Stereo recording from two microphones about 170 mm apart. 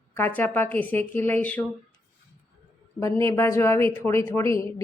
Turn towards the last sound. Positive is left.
turn(degrees=15)  # may be behind; listen again after turning